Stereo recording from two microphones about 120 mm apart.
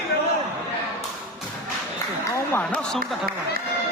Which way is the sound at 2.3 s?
15° left (ahead or behind).